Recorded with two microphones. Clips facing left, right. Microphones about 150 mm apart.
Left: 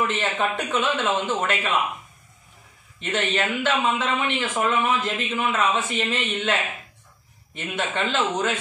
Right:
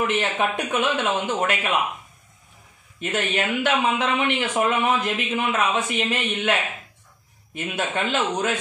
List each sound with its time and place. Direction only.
0.2 s a man's voice: 15° right (ahead or behind)
3.0 s a man's voice: 10° right (ahead or behind)
7.5 s a man's voice: 10° right (ahead or behind)